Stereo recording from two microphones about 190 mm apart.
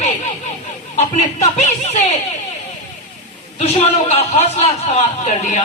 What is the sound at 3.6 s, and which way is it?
Speech, 35° left (ahead or behind).